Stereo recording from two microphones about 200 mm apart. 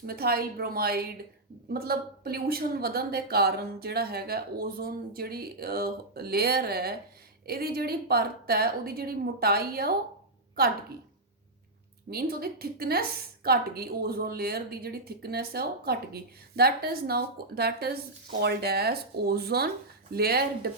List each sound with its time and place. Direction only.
0.0 s a woman's voice: 50° right (ahead or behind)
12.1 s a woman's voice: 50° right (ahead or behind)